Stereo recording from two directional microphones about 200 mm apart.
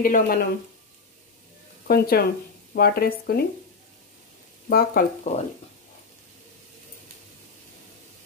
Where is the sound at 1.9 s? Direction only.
50° left (ahead or behind).